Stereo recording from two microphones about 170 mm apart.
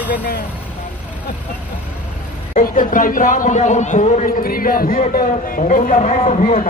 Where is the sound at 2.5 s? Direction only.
50° left (ahead or behind).